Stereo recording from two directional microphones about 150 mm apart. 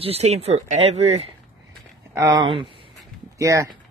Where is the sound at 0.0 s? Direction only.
45° right (ahead or behind).